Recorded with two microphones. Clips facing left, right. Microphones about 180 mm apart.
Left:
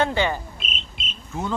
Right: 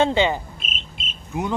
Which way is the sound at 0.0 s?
20° right (ahead or behind).